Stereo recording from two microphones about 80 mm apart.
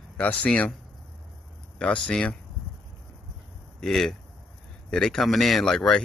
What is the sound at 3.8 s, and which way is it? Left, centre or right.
Speech, centre.